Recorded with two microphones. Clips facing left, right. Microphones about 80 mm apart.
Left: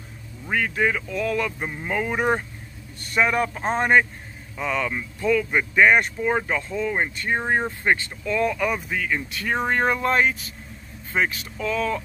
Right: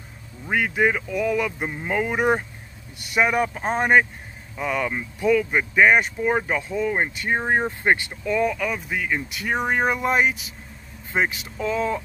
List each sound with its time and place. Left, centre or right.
0.5 s speech: centre
8.5 s speech: centre
8.9 s speech: centre